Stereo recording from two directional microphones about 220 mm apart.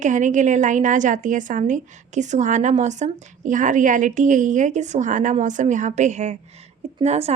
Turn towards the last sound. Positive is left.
turn(degrees=-30)  # may be behind; listen again after turning